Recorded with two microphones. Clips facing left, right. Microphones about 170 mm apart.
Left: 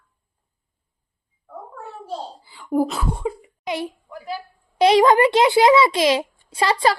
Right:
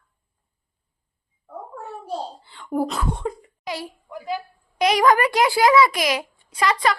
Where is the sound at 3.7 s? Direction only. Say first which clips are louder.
Left 4 dB; 20° left (ahead or behind).